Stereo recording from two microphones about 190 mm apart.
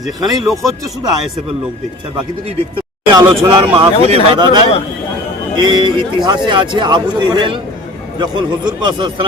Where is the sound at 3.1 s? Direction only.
20° right (ahead or behind).